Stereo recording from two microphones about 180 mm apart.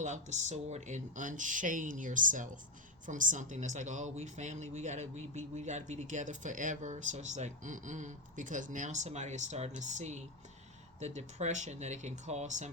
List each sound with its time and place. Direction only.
0.0 s speech: 40° right (ahead or behind)